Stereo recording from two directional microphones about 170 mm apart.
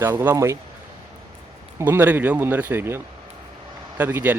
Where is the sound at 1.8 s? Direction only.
10° right (ahead or behind).